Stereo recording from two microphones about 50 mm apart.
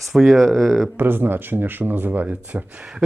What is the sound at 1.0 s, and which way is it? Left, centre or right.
Speech, right.